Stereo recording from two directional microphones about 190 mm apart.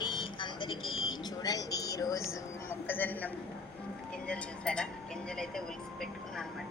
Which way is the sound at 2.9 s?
10° left (ahead or behind).